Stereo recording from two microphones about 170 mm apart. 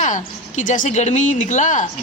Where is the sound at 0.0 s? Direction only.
50° left (ahead or behind).